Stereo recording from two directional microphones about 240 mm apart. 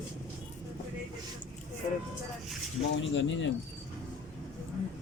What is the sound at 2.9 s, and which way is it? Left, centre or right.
Speech, left.